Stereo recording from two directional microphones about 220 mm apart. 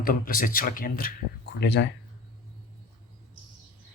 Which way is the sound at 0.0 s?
40° left (ahead or behind).